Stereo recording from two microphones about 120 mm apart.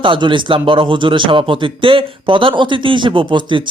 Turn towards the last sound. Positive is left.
turn(degrees=-40)  # may be behind; listen again after turning